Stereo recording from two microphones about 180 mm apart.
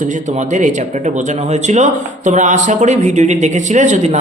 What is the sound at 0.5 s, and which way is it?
A woman's voice, 40° right (ahead or behind).